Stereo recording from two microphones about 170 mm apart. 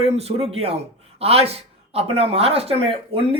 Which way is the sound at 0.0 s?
35° right (ahead or behind).